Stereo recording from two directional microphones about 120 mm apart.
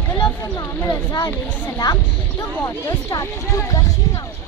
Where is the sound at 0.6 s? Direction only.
30° left (ahead or behind).